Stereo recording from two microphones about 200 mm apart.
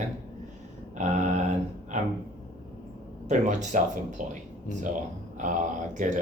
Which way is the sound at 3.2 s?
40° right (ahead or behind).